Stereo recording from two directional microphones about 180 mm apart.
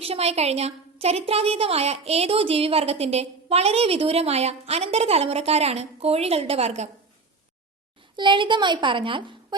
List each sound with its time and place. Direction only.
0.0 s a woman's voice: 35° right (ahead or behind)
8.1 s a woman's voice: 25° right (ahead or behind)